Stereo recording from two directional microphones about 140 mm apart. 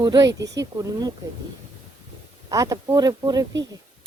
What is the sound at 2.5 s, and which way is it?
Speech, 25° right (ahead or behind).